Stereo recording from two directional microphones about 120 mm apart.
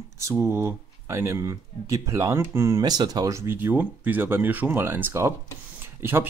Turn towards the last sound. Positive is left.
turn(degrees=-20)  # may be behind; listen again after turning